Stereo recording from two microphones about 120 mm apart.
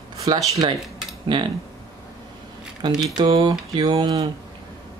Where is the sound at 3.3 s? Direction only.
50° right (ahead or behind).